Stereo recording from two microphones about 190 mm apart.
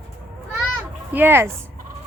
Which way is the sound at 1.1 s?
10° right (ahead or behind).